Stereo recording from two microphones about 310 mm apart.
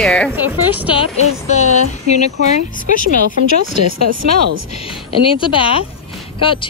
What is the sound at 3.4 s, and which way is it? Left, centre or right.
Speech, left.